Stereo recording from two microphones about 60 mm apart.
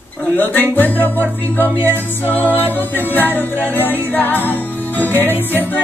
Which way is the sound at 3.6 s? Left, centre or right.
Left.